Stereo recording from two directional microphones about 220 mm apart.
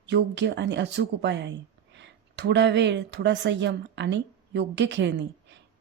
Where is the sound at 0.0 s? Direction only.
50° right (ahead or behind).